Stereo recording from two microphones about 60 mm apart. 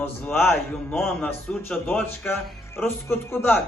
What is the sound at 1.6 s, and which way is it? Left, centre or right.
Speech, left.